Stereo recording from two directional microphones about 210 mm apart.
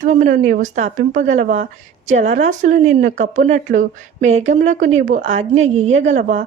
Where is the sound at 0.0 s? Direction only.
35° right (ahead or behind).